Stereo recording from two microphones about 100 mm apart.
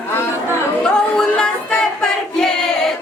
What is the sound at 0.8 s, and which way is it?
Singing, 10° left (ahead or behind).